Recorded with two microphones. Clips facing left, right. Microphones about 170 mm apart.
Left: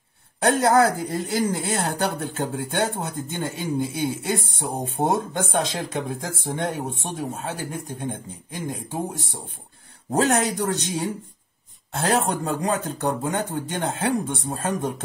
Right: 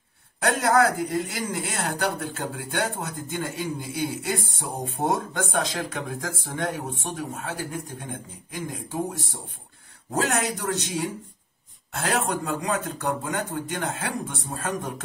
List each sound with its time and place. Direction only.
0.4 s speech: 30° left (ahead or behind)
10.1 s speech: 35° left (ahead or behind)